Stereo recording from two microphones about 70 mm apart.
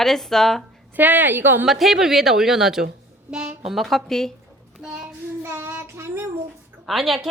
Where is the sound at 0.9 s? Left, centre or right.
Right.